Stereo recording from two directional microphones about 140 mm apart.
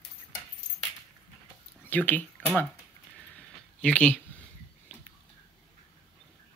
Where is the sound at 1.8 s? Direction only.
10° left (ahead or behind).